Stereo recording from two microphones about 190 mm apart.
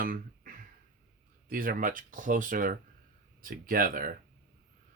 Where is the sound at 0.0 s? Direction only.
50° right (ahead or behind).